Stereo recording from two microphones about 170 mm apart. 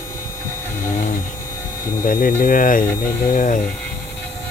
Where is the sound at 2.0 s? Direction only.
55° left (ahead or behind).